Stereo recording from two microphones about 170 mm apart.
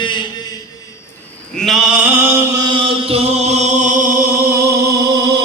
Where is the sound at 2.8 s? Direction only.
35° right (ahead or behind).